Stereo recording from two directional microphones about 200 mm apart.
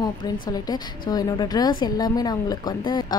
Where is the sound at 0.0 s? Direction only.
20° left (ahead or behind).